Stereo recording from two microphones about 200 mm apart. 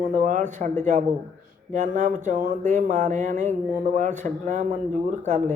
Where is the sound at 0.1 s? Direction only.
40° right (ahead or behind).